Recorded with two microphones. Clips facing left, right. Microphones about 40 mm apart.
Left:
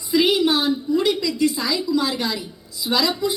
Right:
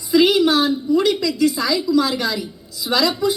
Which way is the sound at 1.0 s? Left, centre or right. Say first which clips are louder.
Right 2 dB; left.